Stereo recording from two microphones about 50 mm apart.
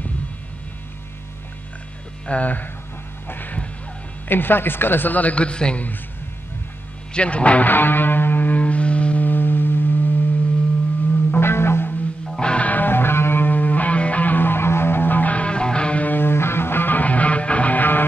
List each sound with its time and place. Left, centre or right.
2.2 s a man's voice: left
3.3 s music: left
4.3 s a man's voice: left
7.2 s speech: left
7.6 s music: left
9.3 s music: left
11.3 s music: left
12.4 s music: centre
12.6 s music: left
16.1 s music: left